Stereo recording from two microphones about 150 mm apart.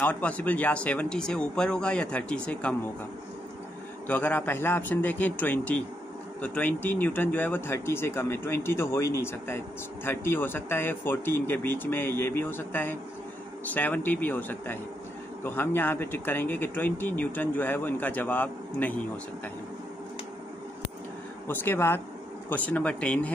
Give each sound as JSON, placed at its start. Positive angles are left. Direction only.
{"t": 0.0, "sound": "speech", "side_deg": 10}
{"t": 4.1, "sound": "speech", "side_deg": 10}
{"t": 21.5, "sound": "speech", "side_deg": 15}